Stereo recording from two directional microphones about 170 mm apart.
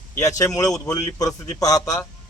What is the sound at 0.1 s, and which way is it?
A man's voice, 20° left (ahead or behind).